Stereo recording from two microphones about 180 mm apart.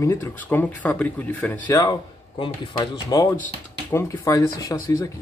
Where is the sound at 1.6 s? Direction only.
20° left (ahead or behind).